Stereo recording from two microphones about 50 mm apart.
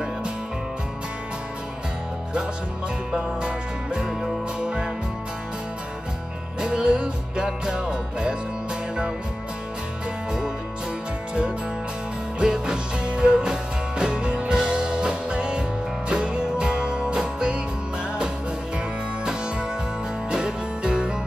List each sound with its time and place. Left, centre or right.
3.1 s music: centre
6.6 s music: right
12.4 s music: centre
20.2 s music: centre